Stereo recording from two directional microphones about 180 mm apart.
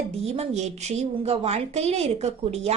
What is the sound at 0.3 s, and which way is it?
A woman's voice, 35° right (ahead or behind).